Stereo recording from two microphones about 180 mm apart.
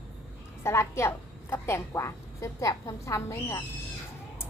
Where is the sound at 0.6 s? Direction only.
15° left (ahead or behind).